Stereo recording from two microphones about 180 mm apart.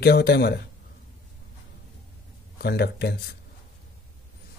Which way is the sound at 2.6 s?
65° left (ahead or behind).